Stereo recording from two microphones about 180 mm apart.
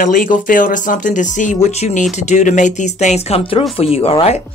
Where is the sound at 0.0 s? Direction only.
50° left (ahead or behind).